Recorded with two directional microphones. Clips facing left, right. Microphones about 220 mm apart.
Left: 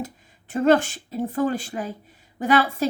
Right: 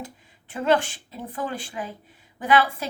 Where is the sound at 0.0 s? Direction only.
45° left (ahead or behind).